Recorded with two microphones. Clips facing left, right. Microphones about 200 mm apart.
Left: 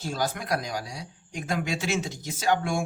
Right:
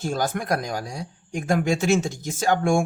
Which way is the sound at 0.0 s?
50° right (ahead or behind).